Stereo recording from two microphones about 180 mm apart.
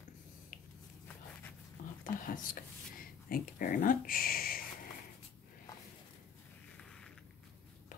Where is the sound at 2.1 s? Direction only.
50° left (ahead or behind).